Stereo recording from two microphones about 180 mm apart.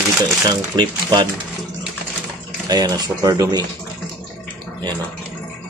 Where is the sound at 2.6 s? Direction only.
20° right (ahead or behind).